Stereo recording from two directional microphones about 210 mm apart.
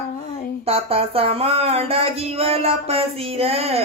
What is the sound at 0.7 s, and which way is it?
Speech, 25° right (ahead or behind).